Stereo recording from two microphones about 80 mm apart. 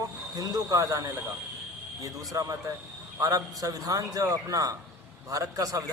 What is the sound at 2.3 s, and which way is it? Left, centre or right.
A man's voice, right.